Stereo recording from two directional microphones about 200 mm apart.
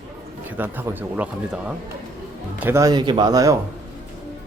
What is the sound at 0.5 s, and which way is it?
Speech, 10° right (ahead or behind).